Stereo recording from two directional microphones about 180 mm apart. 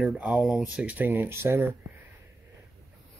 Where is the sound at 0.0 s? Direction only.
5° right (ahead or behind).